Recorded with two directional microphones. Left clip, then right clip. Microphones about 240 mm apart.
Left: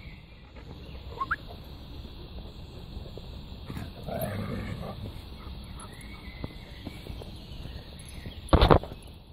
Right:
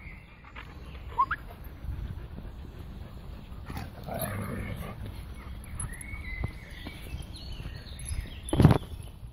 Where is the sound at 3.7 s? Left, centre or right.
Left.